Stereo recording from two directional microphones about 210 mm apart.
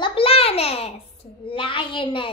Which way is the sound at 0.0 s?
25° left (ahead or behind).